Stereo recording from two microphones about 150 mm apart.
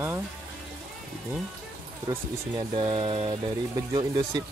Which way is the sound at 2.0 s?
35° right (ahead or behind).